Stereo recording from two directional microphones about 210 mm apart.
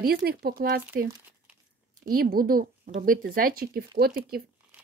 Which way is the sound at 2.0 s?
45° right (ahead or behind).